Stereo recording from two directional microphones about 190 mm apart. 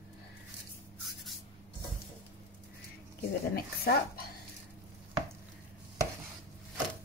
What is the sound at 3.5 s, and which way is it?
Speech, 55° left (ahead or behind).